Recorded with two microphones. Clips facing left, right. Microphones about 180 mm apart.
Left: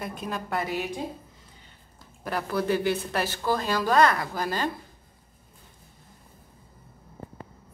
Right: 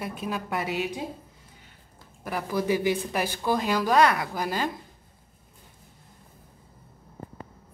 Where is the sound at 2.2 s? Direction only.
10° right (ahead or behind).